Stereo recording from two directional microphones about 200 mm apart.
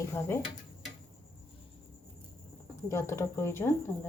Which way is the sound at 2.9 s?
15° left (ahead or behind).